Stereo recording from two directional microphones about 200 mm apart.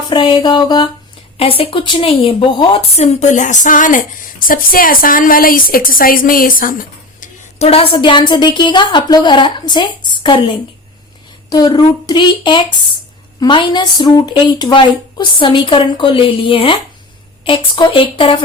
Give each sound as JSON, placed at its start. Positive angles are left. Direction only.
{"t": 0.1, "sound": "a woman's voice", "side_deg": 25}